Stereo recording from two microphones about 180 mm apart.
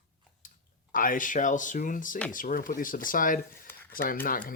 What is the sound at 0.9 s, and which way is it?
Speech, 50° left (ahead or behind).